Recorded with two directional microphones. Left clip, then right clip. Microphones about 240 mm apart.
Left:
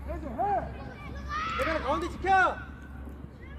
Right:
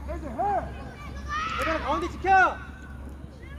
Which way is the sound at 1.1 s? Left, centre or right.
Centre.